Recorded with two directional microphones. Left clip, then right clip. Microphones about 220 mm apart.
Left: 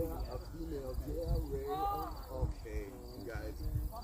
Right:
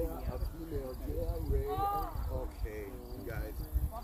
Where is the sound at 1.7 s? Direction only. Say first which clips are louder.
Right 3 dB; 10° right (ahead or behind).